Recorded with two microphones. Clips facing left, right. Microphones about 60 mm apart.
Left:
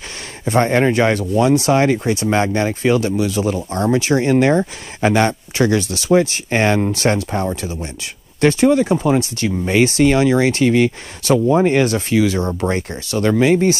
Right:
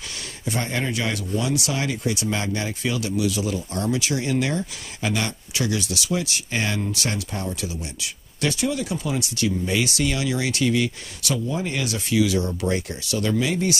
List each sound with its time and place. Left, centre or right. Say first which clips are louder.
0.5 s speech: left 12 dB; left